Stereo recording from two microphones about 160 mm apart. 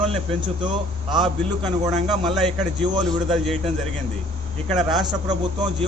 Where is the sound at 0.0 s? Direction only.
30° right (ahead or behind).